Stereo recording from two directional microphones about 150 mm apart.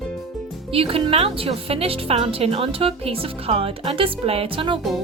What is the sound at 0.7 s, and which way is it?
A woman's voice, 40° right (ahead or behind).